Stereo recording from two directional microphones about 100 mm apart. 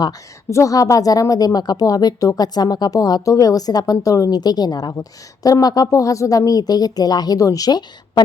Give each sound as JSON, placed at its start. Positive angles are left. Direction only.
{"t": 0.5, "sound": "a woman's voice", "side_deg": 35}